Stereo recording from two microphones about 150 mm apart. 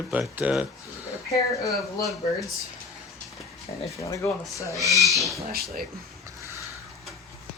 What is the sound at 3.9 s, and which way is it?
Speech, 20° left (ahead or behind).